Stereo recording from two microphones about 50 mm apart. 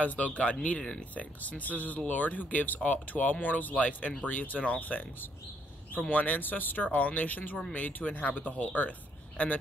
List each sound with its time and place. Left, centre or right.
0.0 s speech: left
0.7 s speech: centre
1.1 s speech: left